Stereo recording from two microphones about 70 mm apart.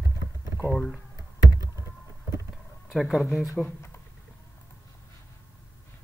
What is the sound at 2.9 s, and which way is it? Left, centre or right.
Speech, centre.